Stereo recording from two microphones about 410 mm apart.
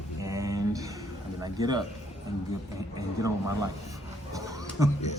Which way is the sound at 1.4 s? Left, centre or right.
Centre.